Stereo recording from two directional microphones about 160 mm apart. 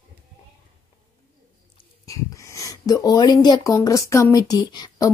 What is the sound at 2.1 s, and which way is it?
Speech, 20° left (ahead or behind).